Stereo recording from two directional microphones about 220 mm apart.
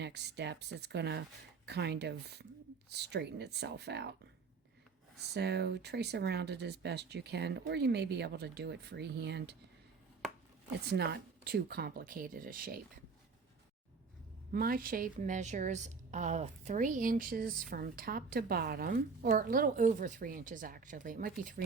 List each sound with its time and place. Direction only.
0.0 s speech: 50° right (ahead or behind)
5.3 s speech: 50° right (ahead or behind)
10.8 s speech: 50° right (ahead or behind)
14.5 s a woman's voice: 40° right (ahead or behind)